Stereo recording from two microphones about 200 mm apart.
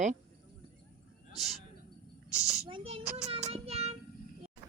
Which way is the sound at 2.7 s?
25° right (ahead or behind).